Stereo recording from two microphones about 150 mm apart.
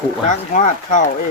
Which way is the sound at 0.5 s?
55° left (ahead or behind).